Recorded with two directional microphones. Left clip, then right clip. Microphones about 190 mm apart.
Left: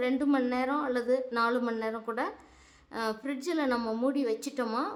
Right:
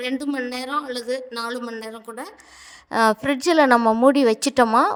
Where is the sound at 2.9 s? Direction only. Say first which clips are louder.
Right 15 dB; 55° right (ahead or behind).